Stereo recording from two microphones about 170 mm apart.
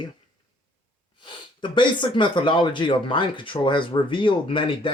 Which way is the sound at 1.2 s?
30° left (ahead or behind).